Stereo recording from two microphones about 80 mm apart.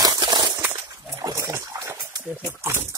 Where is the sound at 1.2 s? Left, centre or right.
Right.